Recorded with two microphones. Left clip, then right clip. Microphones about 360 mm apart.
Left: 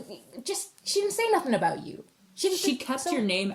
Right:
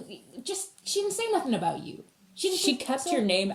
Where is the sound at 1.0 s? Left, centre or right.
Centre.